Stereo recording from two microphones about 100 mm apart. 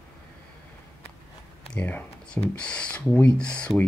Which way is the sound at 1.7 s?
20° left (ahead or behind).